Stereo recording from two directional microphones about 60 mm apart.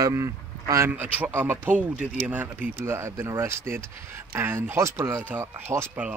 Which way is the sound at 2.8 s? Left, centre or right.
Right.